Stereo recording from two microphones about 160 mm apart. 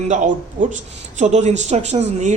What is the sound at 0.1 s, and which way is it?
Speech, 50° right (ahead or behind).